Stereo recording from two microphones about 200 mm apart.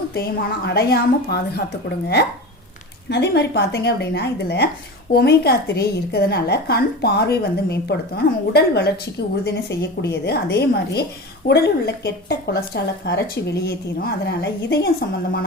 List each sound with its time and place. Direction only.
0.1 s a woman's voice: 50° left (ahead or behind)